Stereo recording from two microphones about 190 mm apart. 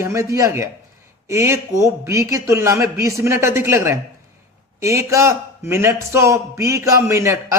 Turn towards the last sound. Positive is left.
turn(degrees=-15)  # may be behind; listen again after turning